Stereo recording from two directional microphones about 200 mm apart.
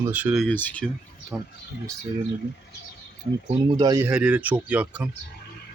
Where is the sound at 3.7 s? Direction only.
20° right (ahead or behind).